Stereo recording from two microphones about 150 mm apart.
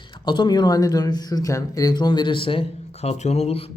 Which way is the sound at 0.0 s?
30° left (ahead or behind).